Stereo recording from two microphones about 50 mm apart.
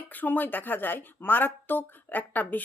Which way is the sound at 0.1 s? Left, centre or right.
Left.